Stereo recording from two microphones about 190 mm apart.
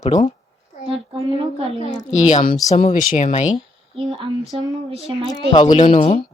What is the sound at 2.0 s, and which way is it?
Speech, 40° left (ahead or behind).